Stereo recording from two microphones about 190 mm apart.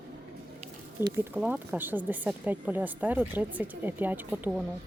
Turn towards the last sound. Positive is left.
turn(degrees=-10)  # may be behind; listen again after turning